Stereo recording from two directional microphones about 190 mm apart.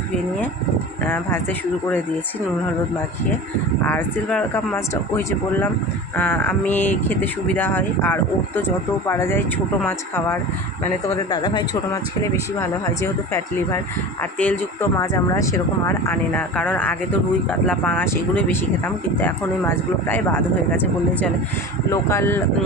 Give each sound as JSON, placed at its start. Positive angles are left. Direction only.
{"t": 1.0, "sound": "speech", "side_deg": 10}
{"t": 3.8, "sound": "speech", "side_deg": 5}
{"t": 11.2, "sound": "speech", "side_deg": 25}